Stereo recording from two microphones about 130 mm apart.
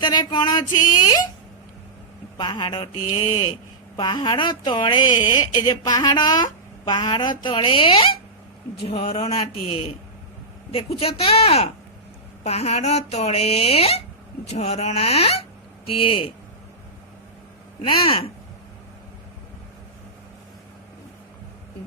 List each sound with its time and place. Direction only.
0.0 s a sound: 35° left (ahead or behind)
2.4 s speech: 35° left (ahead or behind); by 15.4 s 50° left (ahead or behind)
18.0 s speech: 45° left (ahead or behind)